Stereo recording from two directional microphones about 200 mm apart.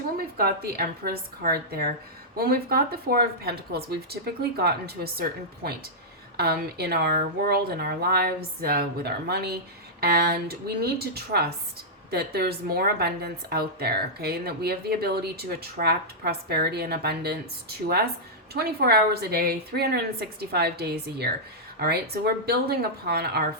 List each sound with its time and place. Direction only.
0.2 s speech: 50° right (ahead or behind)